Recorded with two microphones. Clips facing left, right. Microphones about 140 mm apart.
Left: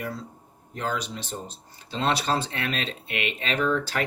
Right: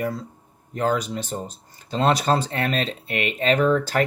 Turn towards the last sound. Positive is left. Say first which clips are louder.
# right 6 dB
turn(degrees=-40)  # may be behind; listen again after turning